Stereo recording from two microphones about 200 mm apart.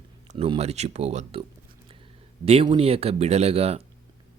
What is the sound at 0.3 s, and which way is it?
Speech, 30° right (ahead or behind).